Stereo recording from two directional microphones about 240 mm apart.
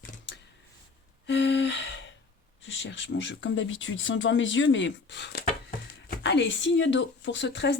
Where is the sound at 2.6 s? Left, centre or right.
Left.